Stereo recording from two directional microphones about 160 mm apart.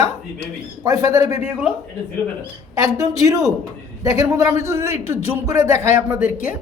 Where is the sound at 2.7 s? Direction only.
20° right (ahead or behind).